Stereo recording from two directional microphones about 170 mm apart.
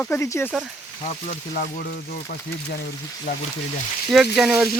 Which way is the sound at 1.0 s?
40° left (ahead or behind).